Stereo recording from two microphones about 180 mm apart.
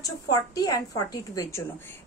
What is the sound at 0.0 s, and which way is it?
A woman's voice, 20° left (ahead or behind).